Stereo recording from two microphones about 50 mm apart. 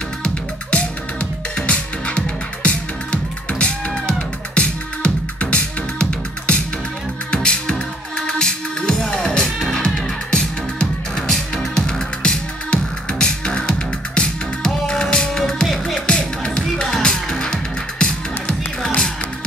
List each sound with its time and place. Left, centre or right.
0.2 s music: left; by 16.0 s centre
16.1 s music: centre